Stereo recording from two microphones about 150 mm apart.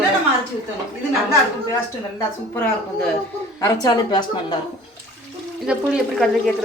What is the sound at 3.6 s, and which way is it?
Speech, 25° left (ahead or behind).